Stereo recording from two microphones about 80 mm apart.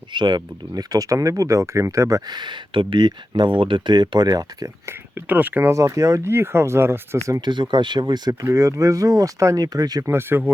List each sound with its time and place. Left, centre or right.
0.1 s speech: right
2.3 s speech: right
4.9 s speech: right
5.7 s speech: right
6.3 s speech: right
7.4 s speech: right
8.4 s speech: right
10.0 s speech: right